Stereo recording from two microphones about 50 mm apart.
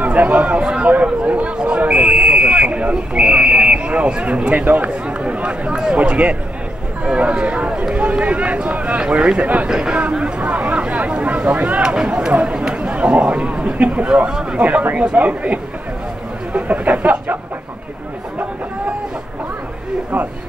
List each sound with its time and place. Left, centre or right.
0.0 s a sound: right
1.0 s speech: right
9.7 s speech: centre; by 11.8 s right
11.8 s speech: centre